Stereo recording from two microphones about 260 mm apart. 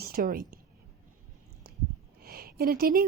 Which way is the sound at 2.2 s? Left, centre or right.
Right.